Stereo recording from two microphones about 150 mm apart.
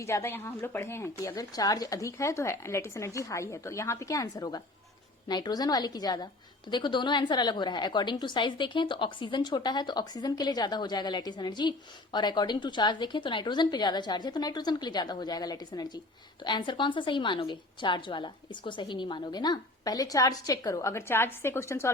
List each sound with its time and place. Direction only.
0.0 s a woman's voice: 20° left (ahead or behind)